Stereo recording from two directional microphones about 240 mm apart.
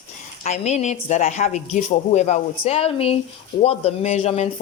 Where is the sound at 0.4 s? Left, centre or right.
Left.